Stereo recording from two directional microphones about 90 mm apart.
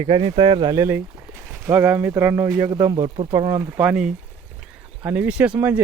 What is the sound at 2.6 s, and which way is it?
Speech, 45° right (ahead or behind).